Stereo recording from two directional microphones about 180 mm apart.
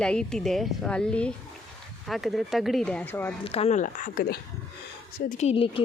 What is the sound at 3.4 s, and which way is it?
Speech, 35° left (ahead or behind).